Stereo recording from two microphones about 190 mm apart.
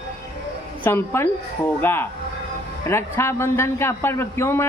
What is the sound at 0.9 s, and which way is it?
A man's voice, 10° left (ahead or behind).